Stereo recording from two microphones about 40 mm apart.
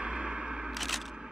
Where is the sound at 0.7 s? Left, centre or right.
Centre.